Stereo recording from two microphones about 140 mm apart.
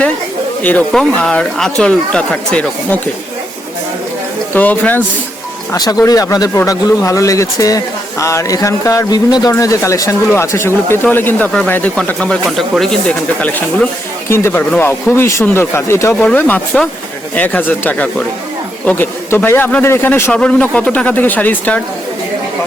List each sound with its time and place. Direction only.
0.6 s speech: 10° left (ahead or behind)
4.5 s speech: 10° left (ahead or behind)
5.7 s speech: 25° left (ahead or behind); by 21.8 s 10° left (ahead or behind)